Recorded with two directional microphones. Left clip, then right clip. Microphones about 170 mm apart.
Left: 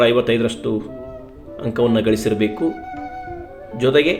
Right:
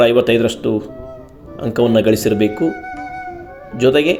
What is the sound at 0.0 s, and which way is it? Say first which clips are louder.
Speech: right 3 dB; 30° right (ahead or behind).